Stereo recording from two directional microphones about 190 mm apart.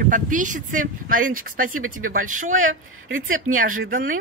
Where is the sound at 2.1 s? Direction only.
45° right (ahead or behind).